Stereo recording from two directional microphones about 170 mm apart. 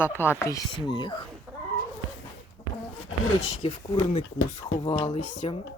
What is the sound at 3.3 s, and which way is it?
Speech, 40° left (ahead or behind).